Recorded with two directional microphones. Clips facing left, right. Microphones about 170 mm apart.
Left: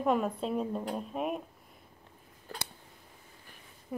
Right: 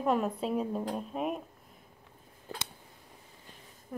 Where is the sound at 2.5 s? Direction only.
20° right (ahead or behind).